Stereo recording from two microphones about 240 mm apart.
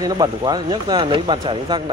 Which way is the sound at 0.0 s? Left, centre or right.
Centre.